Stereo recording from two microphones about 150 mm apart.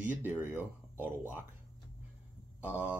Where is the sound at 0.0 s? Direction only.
15° right (ahead or behind).